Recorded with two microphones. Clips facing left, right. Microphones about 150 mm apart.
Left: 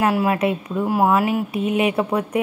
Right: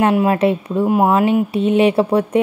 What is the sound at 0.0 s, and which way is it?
Speech, 25° right (ahead or behind).